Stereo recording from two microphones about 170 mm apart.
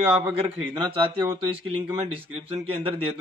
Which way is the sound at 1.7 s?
30° right (ahead or behind).